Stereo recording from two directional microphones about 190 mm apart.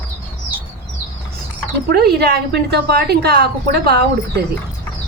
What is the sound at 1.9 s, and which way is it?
A woman's voice, 55° right (ahead or behind).